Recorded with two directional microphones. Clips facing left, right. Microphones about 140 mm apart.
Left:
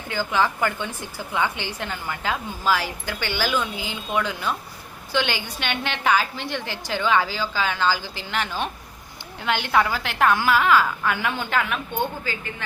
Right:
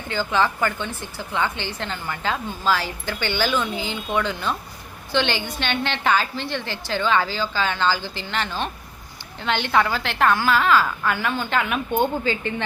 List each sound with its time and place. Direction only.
0.1 s a woman's voice: 10° left (ahead or behind)
11.5 s a woman's voice: centre (ahead or behind)
11.9 s a woman's voice: 25° right (ahead or behind)